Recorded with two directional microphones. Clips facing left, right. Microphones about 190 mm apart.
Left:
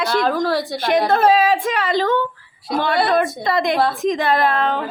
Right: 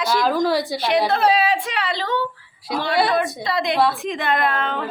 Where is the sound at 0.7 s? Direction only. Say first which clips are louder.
Left 2 dB; 50° left (ahead or behind).